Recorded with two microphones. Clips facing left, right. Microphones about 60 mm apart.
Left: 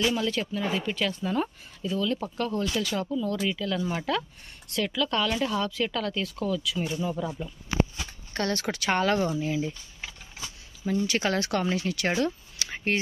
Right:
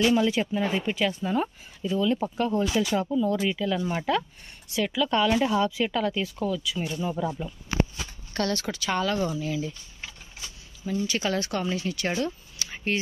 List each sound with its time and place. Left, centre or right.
0.0 s speech: centre
8.3 s speech: left
8.7 s speech: left
9.3 s speech: left
11.1 s speech: left
12.5 s a sound: left